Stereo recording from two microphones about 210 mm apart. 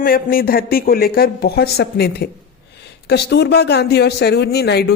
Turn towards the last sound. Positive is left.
turn(degrees=50)  # may be behind; listen again after turning